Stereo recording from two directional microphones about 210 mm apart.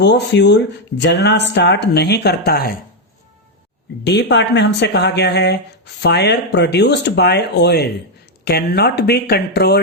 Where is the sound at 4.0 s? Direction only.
50° left (ahead or behind).